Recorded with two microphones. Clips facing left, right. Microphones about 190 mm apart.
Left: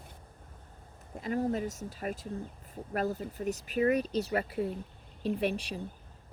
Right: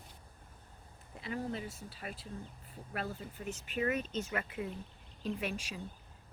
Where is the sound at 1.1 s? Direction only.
45° left (ahead or behind).